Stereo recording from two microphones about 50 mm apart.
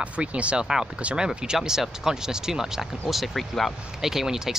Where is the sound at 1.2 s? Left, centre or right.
Centre.